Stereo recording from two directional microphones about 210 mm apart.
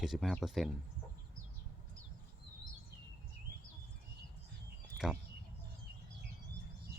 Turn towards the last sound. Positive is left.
turn(degrees=-5)  # may be behind; listen again after turning